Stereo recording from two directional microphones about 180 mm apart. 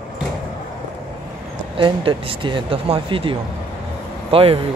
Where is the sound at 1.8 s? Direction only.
30° right (ahead or behind).